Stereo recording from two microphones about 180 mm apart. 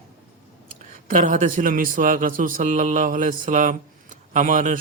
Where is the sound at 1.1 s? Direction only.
45° right (ahead or behind).